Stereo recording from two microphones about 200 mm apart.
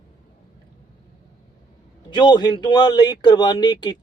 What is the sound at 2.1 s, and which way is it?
A man's voice, 20° left (ahead or behind).